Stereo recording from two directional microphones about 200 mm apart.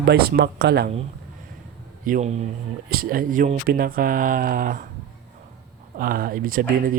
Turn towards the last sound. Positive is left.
turn(degrees=-45)  # may be behind; listen again after turning